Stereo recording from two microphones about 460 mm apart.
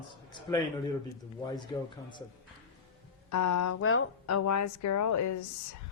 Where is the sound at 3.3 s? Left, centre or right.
Left.